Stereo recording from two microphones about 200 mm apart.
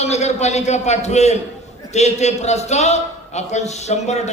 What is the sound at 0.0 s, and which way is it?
A man's voice, 35° left (ahead or behind).